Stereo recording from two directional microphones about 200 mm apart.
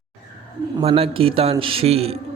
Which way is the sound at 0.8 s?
30° right (ahead or behind).